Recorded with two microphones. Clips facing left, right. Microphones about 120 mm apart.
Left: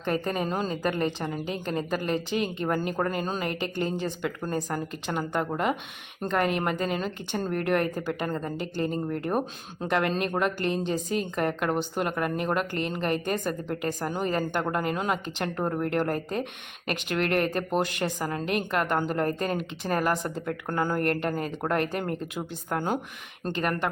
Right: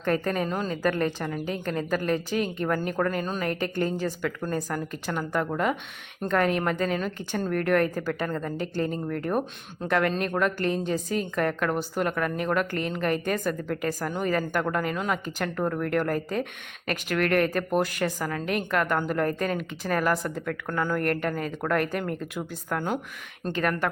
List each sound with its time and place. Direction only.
0.0 s speech: 15° left (ahead or behind)
0.4 s a woman's voice: 25° left (ahead or behind)